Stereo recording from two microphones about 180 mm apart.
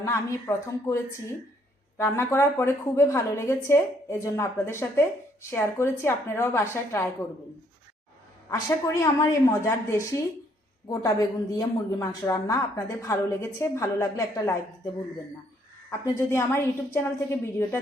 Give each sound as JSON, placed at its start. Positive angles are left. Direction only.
{"t": 0.0, "sound": "a woman's voice", "side_deg": 15}
{"t": 8.4, "sound": "a woman's voice", "side_deg": 20}
{"t": 15.9, "sound": "a woman's voice", "side_deg": 15}